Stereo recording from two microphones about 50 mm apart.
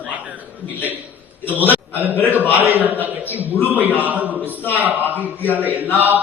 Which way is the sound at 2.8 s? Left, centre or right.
Right.